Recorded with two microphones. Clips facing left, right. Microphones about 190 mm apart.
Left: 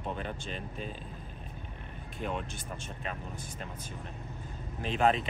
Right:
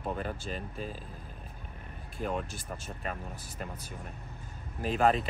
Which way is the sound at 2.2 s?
Centre (ahead or behind).